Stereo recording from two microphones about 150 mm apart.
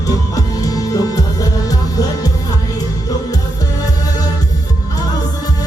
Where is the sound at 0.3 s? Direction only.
25° left (ahead or behind).